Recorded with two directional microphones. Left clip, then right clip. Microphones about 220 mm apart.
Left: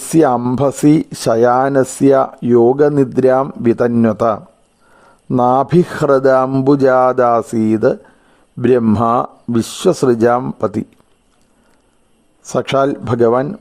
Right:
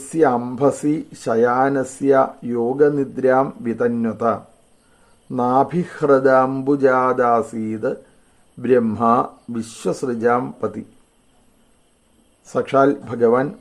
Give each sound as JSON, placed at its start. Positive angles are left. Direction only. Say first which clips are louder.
{"t": 0.1, "sound": "speech", "louder": "left 5 dB", "side_deg": 50}
{"t": 12.5, "sound": "speech", "louder": "left 2 dB", "side_deg": 50}